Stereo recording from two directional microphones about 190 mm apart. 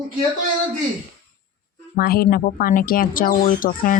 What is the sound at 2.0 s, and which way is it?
Speech, 55° left (ahead or behind).